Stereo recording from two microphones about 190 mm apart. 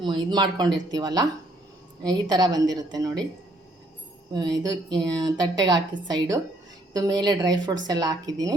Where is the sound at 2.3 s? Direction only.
20° right (ahead or behind).